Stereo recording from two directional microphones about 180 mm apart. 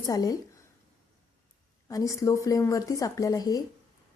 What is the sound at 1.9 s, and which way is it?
A woman's voice, 20° left (ahead or behind).